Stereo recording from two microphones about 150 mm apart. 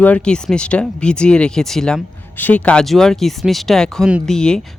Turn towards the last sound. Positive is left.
turn(degrees=5)  # may be behind; listen again after turning